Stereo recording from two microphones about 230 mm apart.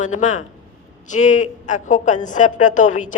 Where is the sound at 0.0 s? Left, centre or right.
Left.